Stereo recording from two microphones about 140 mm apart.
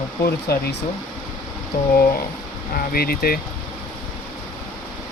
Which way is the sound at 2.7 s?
90° left.